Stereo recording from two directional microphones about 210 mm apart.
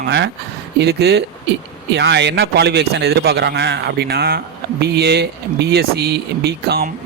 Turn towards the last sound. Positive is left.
turn(degrees=-50)  # may be behind; listen again after turning